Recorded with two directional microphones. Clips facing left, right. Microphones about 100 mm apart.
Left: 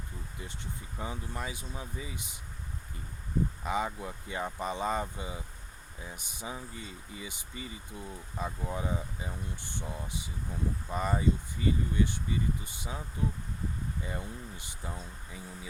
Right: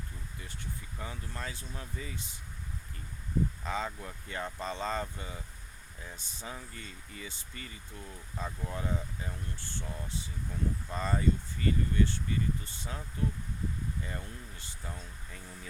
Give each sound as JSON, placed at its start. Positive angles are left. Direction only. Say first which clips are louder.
{"t": 0.3, "sound": "speech", "louder": "left 1 dB", "side_deg": 20}
{"t": 3.6, "sound": "speech", "louder": "left 3 dB", "side_deg": 15}